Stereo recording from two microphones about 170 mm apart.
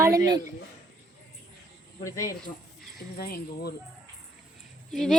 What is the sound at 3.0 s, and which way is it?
Speech, 65° left (ahead or behind).